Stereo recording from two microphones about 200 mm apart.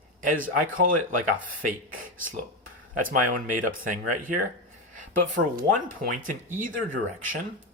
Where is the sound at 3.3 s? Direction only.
40° right (ahead or behind).